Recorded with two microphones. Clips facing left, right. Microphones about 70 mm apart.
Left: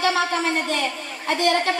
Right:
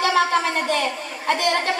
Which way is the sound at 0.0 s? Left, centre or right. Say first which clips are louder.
Right 2 dB; right.